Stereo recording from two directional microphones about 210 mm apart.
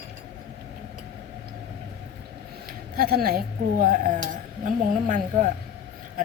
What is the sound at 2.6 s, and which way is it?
Speech, 45° right (ahead or behind).